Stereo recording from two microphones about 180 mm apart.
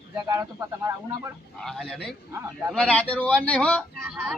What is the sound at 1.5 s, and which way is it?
Speech, 5° left (ahead or behind).